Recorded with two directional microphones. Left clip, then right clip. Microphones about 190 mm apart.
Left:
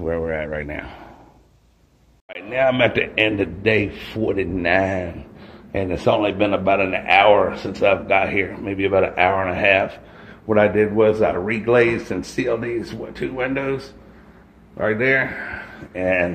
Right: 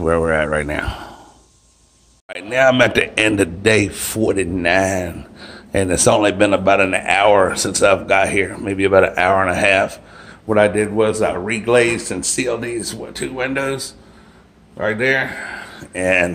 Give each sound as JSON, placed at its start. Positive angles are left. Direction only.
{"t": 0.0, "sound": "a man's voice", "side_deg": -40}
{"t": 2.2, "sound": "a man's voice", "side_deg": -30}
{"t": 5.7, "sound": "speech", "side_deg": -35}
{"t": 10.4, "sound": "speech", "side_deg": -15}
{"t": 14.8, "sound": "speech", "side_deg": 0}
{"t": 15.9, "sound": "speech", "side_deg": -25}